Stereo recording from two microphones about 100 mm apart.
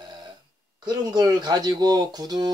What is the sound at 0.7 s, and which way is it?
Speech, 45° right (ahead or behind).